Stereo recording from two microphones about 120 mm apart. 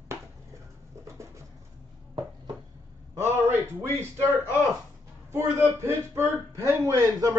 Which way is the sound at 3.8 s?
20° right (ahead or behind).